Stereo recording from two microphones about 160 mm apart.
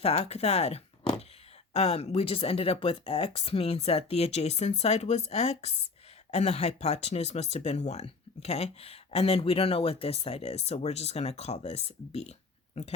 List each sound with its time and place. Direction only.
0.0 s speech: 40° left (ahead or behind)